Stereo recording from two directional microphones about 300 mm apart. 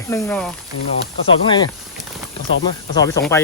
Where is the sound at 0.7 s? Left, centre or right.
Left.